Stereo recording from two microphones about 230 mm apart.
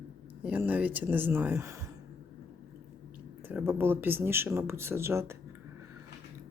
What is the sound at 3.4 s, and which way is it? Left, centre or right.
Speech, centre.